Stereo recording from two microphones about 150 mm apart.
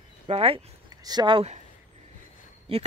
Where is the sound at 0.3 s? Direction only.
40° right (ahead or behind).